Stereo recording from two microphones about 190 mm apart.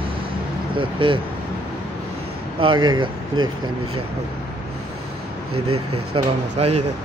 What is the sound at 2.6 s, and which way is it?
Speech, 25° right (ahead or behind).